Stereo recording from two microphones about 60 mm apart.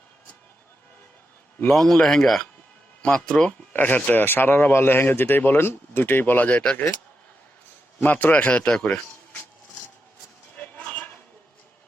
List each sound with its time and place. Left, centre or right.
1.7 s speech: centre
3.7 s a man's voice: left
7.9 s a man's voice: left
8.4 s a man's voice: centre
8.9 s a sound: left
10.6 s a sound: left